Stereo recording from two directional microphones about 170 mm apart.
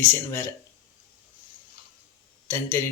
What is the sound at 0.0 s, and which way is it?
Speech, 15° left (ahead or behind).